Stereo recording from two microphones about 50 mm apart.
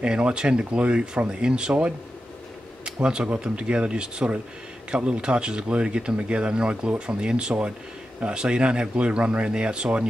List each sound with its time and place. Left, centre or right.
0.0 s speech: centre